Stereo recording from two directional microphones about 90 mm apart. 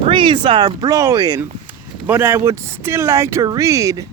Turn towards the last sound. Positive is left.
turn(degrees=-35)  # may be behind; listen again after turning